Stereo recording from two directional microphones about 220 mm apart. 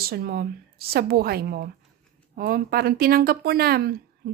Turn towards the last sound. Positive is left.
turn(degrees=-45)  # may be behind; listen again after turning